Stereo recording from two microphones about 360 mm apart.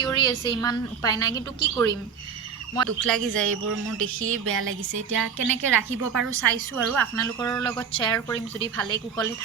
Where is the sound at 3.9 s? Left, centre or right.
Right.